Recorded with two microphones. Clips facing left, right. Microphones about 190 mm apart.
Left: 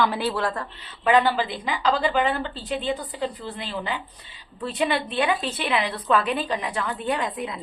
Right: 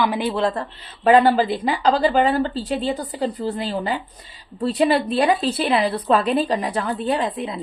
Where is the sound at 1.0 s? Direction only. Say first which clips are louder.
Right 6 dB; 40° right (ahead or behind).